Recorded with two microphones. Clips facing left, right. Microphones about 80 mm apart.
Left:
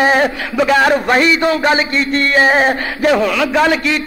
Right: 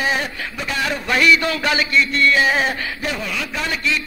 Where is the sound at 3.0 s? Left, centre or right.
Left.